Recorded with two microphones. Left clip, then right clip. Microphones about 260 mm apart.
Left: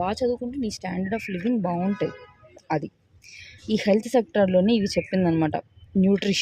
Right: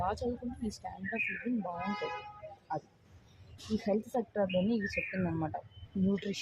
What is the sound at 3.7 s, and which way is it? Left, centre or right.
Speech, left.